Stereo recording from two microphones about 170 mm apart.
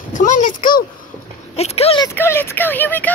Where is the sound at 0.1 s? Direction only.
50° left (ahead or behind).